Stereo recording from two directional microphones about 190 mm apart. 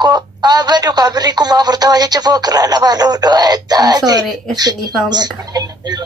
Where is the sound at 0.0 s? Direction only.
20° right (ahead or behind).